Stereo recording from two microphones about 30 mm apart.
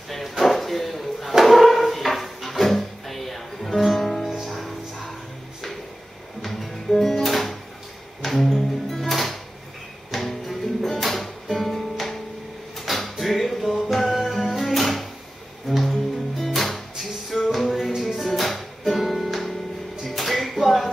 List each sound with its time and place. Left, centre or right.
0.4 s a sound: centre
4.5 s music: centre
6.4 s music: centre